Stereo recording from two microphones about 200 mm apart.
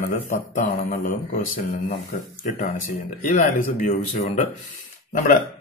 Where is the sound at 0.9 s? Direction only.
40° left (ahead or behind).